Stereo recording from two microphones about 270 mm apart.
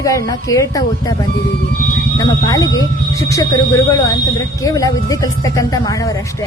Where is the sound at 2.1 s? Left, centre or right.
Centre.